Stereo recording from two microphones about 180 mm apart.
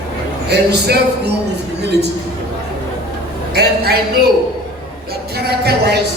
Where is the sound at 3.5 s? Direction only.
60° right (ahead or behind).